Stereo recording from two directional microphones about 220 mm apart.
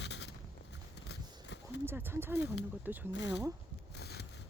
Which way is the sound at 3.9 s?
45° left (ahead or behind).